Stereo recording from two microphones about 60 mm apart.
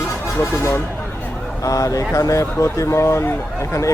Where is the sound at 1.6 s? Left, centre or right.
Left.